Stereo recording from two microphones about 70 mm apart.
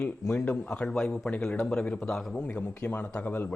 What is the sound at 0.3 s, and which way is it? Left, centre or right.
A man's voice, centre.